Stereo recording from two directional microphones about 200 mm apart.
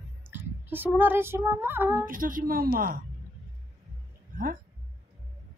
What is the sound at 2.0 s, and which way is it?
Speech, 45° right (ahead or behind).